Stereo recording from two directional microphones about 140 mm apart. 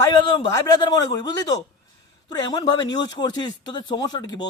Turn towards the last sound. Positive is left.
turn(degrees=30)  # may be behind; listen again after turning